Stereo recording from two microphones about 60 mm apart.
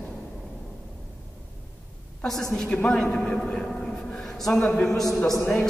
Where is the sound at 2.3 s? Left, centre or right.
Centre.